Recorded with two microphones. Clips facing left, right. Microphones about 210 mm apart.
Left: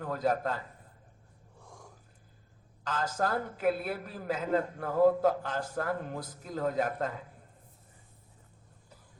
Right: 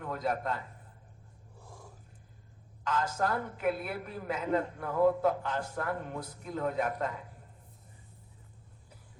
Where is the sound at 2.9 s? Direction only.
35° left (ahead or behind).